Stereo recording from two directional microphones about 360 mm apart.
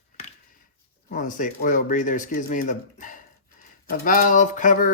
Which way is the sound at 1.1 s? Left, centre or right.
Left.